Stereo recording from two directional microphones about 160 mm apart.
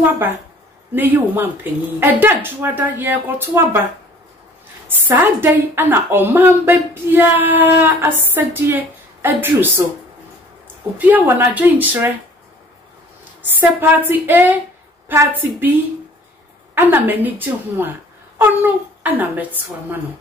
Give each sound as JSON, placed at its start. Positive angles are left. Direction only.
{"t": 0.9, "sound": "a woman's voice", "side_deg": -10}
{"t": 4.8, "sound": "a woman's voice", "side_deg": -15}
{"t": 11.0, "sound": "a woman's voice", "side_deg": -10}
{"t": 13.6, "sound": "a woman's voice", "side_deg": -10}
{"t": 16.7, "sound": "a woman's voice", "side_deg": -10}